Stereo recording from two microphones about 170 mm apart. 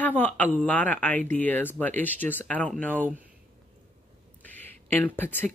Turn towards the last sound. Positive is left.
turn(degrees=10)  # may be behind; listen again after turning